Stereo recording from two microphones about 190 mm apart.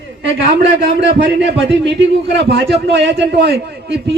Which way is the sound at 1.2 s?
65° right (ahead or behind).